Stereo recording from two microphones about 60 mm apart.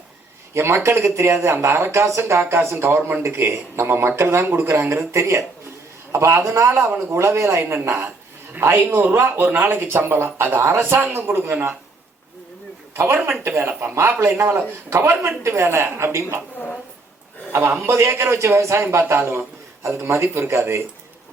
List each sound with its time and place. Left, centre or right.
0.5 s speech: right
8.5 s speech: right
13.0 s speech: right
17.5 s speech: right